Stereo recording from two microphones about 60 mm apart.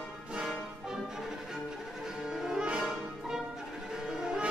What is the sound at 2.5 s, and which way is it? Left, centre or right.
Music, centre.